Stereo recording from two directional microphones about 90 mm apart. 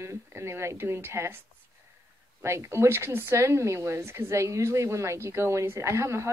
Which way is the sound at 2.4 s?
30° right (ahead or behind).